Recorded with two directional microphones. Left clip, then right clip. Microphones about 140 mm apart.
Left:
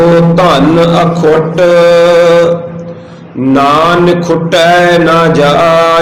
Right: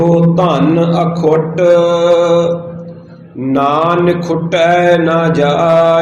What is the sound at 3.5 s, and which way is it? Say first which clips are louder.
Mantra: left 5 dB; 25° left (ahead or behind).